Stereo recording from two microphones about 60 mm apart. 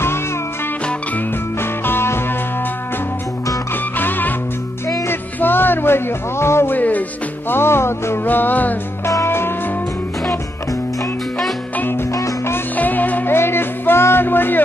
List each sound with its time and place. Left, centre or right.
1.6 s music: left
5.0 s music: left
6.7 s music: left
7.4 s music: left
8.3 s music: left
9.0 s music: left
12.7 s music: left